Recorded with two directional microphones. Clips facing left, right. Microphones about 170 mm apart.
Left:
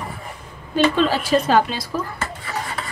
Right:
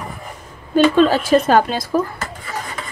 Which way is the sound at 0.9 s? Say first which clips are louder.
Right 5 dB; 50° right (ahead or behind).